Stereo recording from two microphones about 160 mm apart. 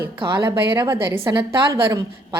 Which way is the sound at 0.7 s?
15° right (ahead or behind).